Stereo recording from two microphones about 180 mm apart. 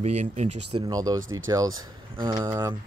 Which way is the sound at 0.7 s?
25° right (ahead or behind).